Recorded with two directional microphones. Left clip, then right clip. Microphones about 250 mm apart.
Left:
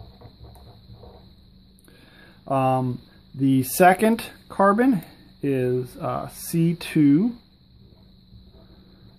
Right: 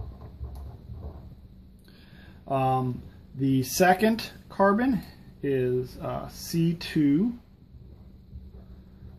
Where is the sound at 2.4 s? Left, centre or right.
Left.